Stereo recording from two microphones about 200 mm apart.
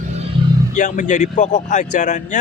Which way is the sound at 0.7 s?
40° left (ahead or behind).